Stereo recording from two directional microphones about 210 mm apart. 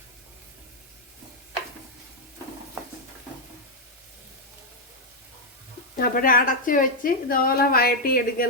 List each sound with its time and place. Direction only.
6.0 s a woman's voice: 40° left (ahead or behind)